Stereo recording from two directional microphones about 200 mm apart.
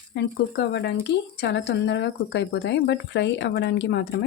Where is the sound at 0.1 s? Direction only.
55° left (ahead or behind).